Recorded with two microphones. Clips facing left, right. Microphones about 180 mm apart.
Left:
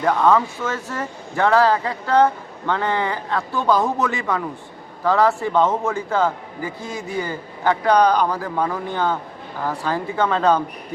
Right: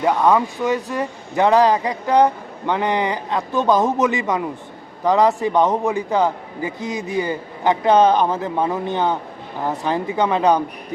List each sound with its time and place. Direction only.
0.0 s a man's voice: 15° right (ahead or behind)